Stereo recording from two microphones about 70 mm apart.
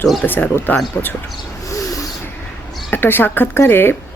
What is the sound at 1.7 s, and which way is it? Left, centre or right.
Owl, left.